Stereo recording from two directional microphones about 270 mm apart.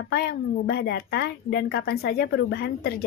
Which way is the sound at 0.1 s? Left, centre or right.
Left.